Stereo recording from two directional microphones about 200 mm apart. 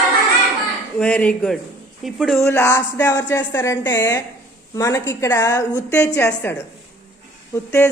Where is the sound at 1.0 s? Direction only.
5° left (ahead or behind).